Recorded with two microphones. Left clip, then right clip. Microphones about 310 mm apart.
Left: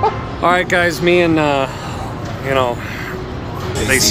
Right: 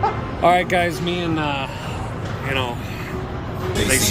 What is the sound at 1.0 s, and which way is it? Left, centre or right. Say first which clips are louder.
Speech: left 10 dB; centre.